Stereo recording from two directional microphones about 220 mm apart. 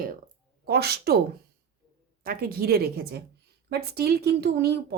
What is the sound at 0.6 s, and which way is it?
Speech, 45° right (ahead or behind).